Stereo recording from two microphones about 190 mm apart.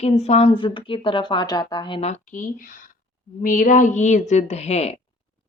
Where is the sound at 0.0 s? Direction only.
35° left (ahead or behind).